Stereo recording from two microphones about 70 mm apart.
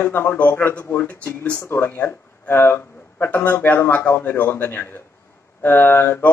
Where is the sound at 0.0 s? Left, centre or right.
Left.